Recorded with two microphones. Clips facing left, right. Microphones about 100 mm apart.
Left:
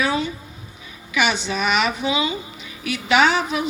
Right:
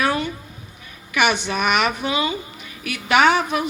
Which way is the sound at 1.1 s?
55° right (ahead or behind).